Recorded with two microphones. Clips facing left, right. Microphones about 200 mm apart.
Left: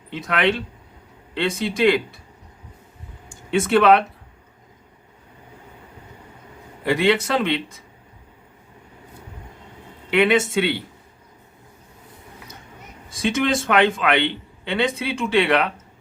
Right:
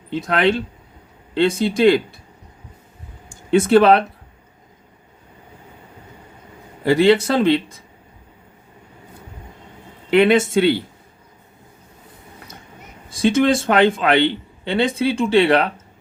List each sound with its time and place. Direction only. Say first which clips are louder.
0.1 s a man's voice: right 4 dB; 35° right (ahead or behind)
3.5 s a man's voice: right 3 dB; 35° right (ahead or behind)
6.8 s a man's voice: right 5 dB; 35° right (ahead or behind)
10.1 s a man's voice: right 4 dB; 40° right (ahead or behind)
13.1 s a man's voice: right 6 dB; 30° right (ahead or behind)